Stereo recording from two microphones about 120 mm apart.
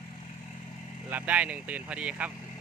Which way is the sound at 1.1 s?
15° right (ahead or behind).